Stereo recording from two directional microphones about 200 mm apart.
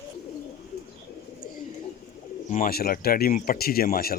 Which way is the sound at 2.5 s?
45° left (ahead or behind).